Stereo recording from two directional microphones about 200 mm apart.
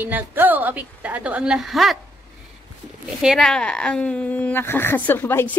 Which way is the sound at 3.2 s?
Centre (ahead or behind).